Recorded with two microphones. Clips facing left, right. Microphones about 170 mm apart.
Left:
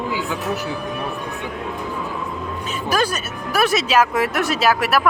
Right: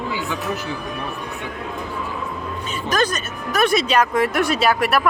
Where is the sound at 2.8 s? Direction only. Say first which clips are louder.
Even; 10° left (ahead or behind).